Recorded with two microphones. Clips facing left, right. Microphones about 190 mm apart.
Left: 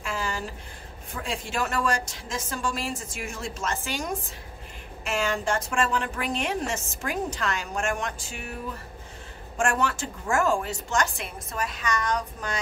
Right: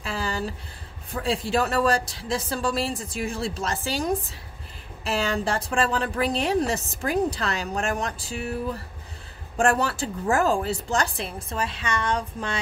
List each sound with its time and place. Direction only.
0.0 s a sound: 35° right (ahead or behind)
1.1 s a woman's voice: 35° right (ahead or behind)
9.6 s a woman's voice: 35° right (ahead or behind)